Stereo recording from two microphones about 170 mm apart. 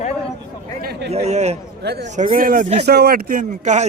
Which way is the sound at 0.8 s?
70° right (ahead or behind).